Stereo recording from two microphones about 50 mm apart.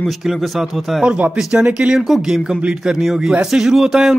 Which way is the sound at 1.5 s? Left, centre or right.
Right.